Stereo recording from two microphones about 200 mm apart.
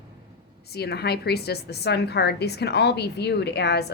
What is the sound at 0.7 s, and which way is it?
A woman's voice, 55° left (ahead or behind).